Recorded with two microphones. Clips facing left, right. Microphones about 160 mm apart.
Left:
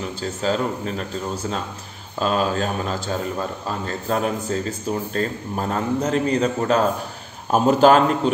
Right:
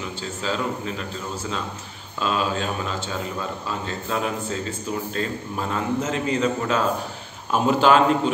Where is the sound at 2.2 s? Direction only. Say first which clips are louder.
Left 3 dB; 45° left (ahead or behind).